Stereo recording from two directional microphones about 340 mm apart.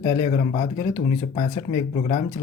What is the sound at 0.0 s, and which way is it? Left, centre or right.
Speech, centre.